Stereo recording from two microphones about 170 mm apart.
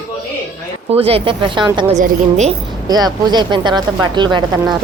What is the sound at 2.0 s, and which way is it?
Speech, 40° right (ahead or behind).